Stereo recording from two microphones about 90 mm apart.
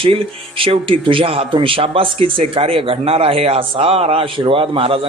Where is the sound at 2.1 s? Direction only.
90° right.